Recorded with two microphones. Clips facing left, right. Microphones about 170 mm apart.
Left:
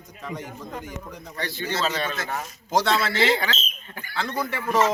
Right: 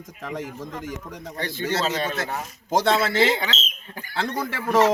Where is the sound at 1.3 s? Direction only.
50° right (ahead or behind).